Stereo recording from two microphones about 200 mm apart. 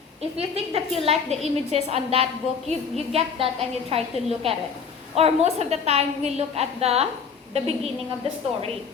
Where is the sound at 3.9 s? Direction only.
30° right (ahead or behind).